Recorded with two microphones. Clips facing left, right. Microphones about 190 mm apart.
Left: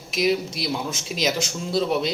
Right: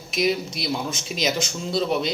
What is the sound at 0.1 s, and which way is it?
Speech, centre (ahead or behind).